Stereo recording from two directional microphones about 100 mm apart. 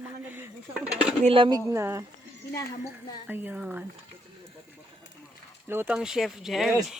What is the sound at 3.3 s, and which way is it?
Speech, 15° right (ahead or behind).